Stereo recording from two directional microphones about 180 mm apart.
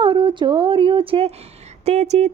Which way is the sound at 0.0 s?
25° right (ahead or behind).